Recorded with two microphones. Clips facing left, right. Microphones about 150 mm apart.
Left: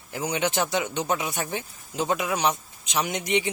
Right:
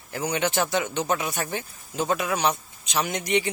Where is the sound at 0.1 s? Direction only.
15° left (ahead or behind).